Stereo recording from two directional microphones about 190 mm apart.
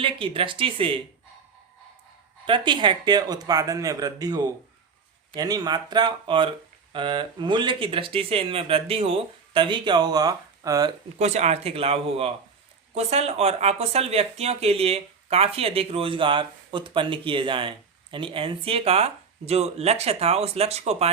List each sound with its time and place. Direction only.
0.0 s speech: 25° right (ahead or behind)
2.5 s speech: 25° right (ahead or behind)
11.2 s speech: 35° right (ahead or behind)